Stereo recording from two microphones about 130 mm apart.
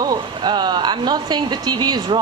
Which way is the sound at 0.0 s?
30° right (ahead or behind).